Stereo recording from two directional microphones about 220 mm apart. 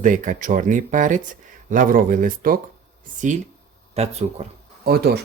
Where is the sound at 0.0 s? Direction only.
35° right (ahead or behind).